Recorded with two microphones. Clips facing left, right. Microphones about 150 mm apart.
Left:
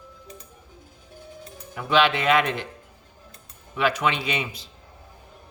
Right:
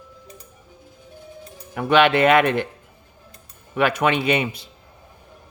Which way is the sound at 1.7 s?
60° right (ahead or behind).